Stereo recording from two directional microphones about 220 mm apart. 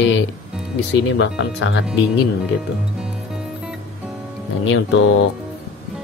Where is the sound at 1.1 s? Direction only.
60° left (ahead or behind).